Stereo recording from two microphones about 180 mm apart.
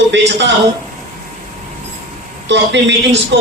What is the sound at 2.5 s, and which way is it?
Speech, 80° right.